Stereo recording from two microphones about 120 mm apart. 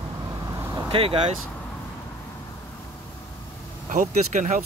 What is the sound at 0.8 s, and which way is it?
Speech, 50° right (ahead or behind).